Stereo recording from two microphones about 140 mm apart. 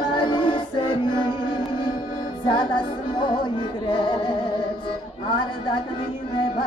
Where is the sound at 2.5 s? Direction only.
35° left (ahead or behind).